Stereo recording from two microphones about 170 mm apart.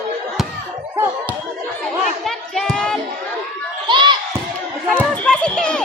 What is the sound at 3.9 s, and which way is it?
Basketball bounce, 25° right (ahead or behind).